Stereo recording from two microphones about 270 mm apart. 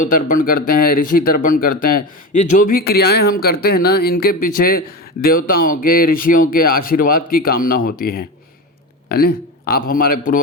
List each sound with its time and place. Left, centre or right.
0.0 s a man's voice: left